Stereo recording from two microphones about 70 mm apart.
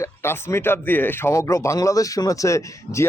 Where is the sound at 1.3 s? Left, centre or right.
Left.